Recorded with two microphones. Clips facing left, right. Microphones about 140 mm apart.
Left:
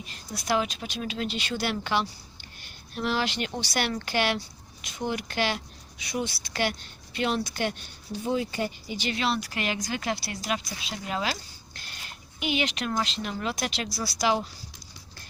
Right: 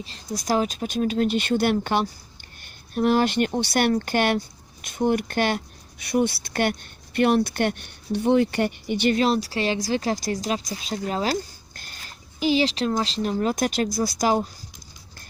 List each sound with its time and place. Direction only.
0.0 s speech: 35° right (ahead or behind); by 9.1 s 60° right (ahead or behind)
9.1 s speech: 40° right (ahead or behind)
11.8 s a sound: 40° right (ahead or behind)
13.0 s speech: 35° right (ahead or behind)